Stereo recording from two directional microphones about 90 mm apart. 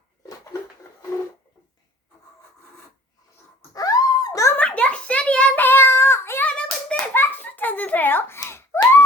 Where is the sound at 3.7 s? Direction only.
40° left (ahead or behind).